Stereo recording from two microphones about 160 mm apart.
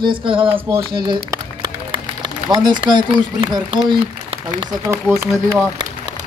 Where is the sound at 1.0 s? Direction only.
25° right (ahead or behind).